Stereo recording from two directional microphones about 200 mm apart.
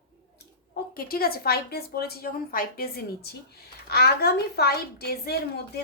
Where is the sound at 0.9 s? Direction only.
50° left (ahead or behind).